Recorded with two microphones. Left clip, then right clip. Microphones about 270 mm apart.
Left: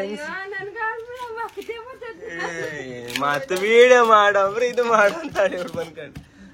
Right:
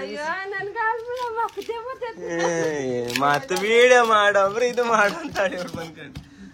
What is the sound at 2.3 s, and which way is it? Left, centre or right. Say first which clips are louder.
Speech: right 6 dB; centre.